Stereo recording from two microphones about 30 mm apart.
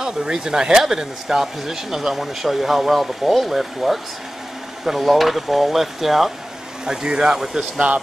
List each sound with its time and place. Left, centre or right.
0.0 s speech: right; by 4.0 s centre
5.1 s speech: centre
6.9 s speech: right